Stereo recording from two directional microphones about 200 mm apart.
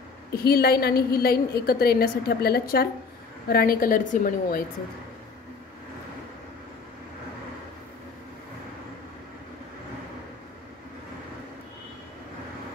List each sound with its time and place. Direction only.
0.4 s a woman's voice: 50° left (ahead or behind)